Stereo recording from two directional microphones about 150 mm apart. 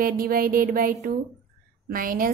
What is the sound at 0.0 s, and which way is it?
A woman's voice, 80° right.